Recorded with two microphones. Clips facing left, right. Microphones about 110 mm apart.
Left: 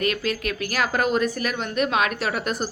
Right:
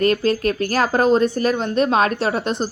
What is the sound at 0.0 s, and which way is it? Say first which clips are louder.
Speech: right 8 dB; 35° right (ahead or behind).